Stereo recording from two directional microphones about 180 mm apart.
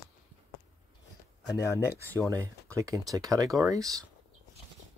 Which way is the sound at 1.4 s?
15° left (ahead or behind).